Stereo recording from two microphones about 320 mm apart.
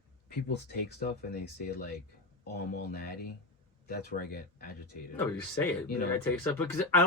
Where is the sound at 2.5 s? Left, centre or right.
Left.